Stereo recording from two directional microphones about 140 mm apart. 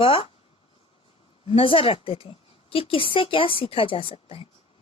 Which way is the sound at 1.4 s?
40° left (ahead or behind).